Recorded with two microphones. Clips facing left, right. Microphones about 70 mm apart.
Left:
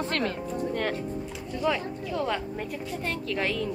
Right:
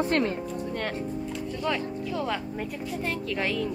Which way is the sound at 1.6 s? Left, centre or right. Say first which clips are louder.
Left 2 dB; centre.